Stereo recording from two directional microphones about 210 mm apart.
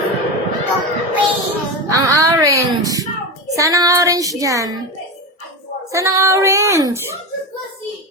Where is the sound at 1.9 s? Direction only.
15° right (ahead or behind).